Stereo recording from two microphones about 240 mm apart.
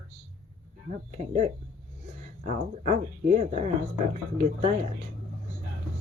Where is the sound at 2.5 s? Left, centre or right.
Right.